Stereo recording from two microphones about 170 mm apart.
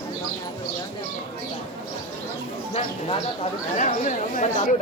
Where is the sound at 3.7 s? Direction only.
45° left (ahead or behind).